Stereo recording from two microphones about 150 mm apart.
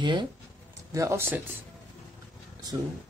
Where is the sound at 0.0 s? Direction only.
30° right (ahead or behind).